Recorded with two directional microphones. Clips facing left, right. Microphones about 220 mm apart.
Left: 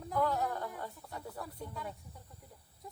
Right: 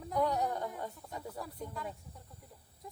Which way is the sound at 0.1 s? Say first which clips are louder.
Right 1 dB; 15° right (ahead or behind).